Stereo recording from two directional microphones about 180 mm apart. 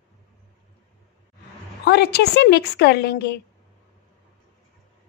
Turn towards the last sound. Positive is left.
turn(degrees=65)  # may be behind; listen again after turning